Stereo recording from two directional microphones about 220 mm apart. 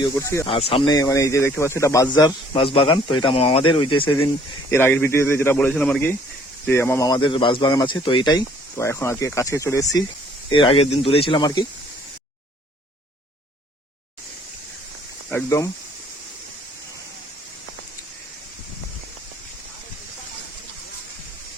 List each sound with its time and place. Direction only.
0.0 s speech: 15° left (ahead or behind)
0.4 s speech: 25° left (ahead or behind)
4.7 s speech: 10° left (ahead or behind)
15.3 s speech: 10° left (ahead or behind)